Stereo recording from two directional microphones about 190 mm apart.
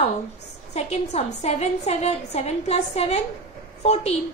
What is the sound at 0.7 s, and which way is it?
A woman's voice, 35° left (ahead or behind).